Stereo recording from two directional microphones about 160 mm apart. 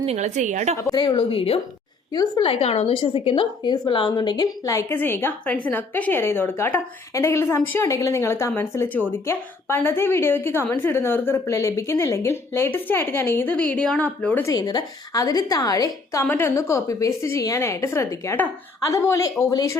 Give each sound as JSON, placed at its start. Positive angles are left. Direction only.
{"t": 0.0, "sound": "a woman's voice", "side_deg": -45}
{"t": 0.8, "sound": "a woman's voice", "side_deg": 20}
{"t": 2.1, "sound": "a woman's voice", "side_deg": 25}
{"t": 2.5, "sound": "a woman's voice", "side_deg": 40}
{"t": 14.5, "sound": "a woman's voice", "side_deg": 25}
{"t": 16.2, "sound": "a woman's voice", "side_deg": 10}